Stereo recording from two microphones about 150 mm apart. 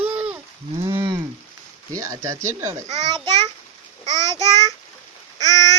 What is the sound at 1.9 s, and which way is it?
Speech, 20° right (ahead or behind).